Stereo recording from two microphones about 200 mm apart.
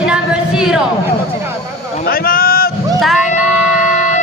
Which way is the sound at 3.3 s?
40° left (ahead or behind).